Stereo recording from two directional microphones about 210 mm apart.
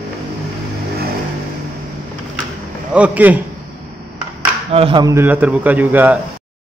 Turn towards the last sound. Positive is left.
turn(degrees=-10)  # may be behind; listen again after turning